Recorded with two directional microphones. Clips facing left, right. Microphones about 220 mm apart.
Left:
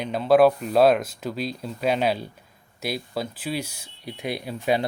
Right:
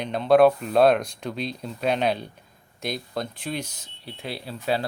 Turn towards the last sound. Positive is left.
turn(degrees=15)  # may be behind; listen again after turning